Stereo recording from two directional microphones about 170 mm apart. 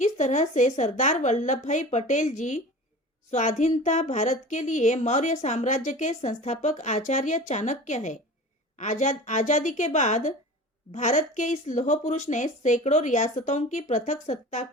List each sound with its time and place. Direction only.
0.0 s speech: 45° left (ahead or behind)